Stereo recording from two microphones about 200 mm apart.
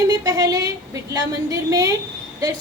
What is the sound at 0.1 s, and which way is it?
A woman's voice, 20° right (ahead or behind).